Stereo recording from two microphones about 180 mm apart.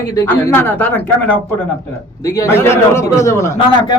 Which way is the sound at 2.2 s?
20° left (ahead or behind).